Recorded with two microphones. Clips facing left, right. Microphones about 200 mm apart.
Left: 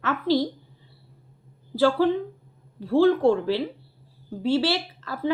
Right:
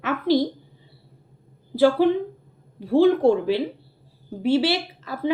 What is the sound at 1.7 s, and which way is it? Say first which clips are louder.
A woman's voice: right 3 dB; 15° right (ahead or behind).